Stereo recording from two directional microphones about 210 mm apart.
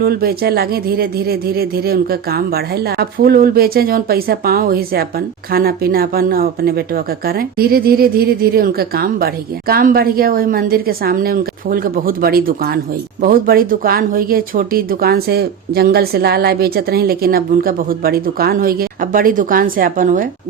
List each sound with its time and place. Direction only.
0.0 s speech: 45° right (ahead or behind)